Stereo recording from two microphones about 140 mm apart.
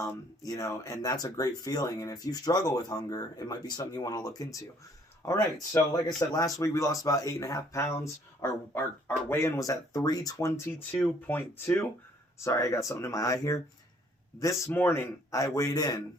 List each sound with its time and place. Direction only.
0.0 s speech: 25° left (ahead or behind)